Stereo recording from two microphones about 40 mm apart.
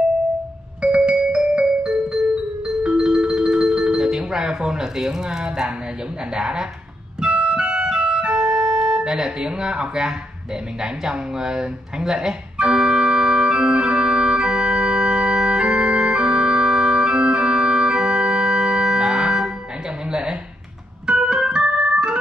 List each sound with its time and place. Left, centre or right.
0.8 s music: right
6.3 s speech: right
7.2 s keyboard: right
8.0 s organ: right
10.8 s speech: centre
12.5 s organ: centre
20.1 s a sound: centre
21.1 s organ: right